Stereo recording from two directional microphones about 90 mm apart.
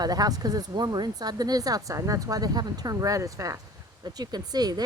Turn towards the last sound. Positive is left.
turn(degrees=-45)  # may be behind; listen again after turning